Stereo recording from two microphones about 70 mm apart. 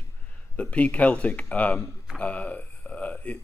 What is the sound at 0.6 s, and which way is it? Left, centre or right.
Speech, centre.